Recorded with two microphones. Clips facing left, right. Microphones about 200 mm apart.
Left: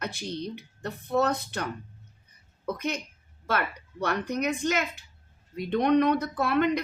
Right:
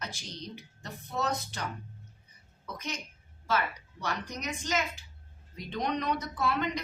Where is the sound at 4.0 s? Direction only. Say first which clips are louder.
Left 8 dB; 60° left (ahead or behind).